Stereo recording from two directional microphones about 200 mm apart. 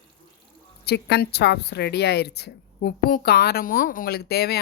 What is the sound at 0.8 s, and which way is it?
A woman's voice, 55° left (ahead or behind).